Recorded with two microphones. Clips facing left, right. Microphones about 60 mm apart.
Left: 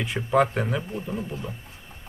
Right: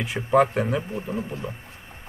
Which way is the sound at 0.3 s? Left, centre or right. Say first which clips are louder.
Right 3 dB; centre.